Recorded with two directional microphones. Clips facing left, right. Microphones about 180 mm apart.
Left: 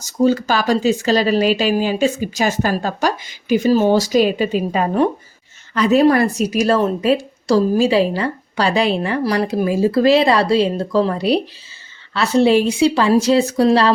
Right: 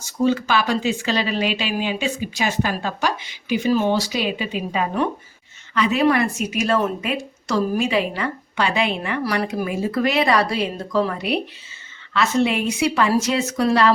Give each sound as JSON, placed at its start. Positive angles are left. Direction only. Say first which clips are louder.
{"t": 0.0, "sound": "a woman's voice", "louder": "left 4 dB", "side_deg": 40}